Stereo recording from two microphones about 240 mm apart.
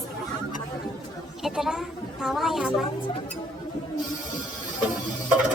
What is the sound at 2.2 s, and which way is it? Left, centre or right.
Speech, centre.